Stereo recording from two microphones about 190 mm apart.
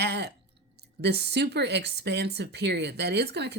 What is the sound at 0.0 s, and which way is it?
Chewing, 60° right (ahead or behind).